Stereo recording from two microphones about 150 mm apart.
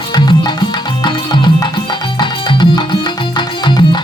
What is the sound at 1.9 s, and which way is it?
Music, 30° left (ahead or behind).